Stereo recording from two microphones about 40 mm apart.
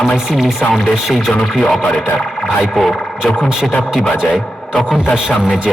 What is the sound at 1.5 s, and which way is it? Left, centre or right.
Speech, centre.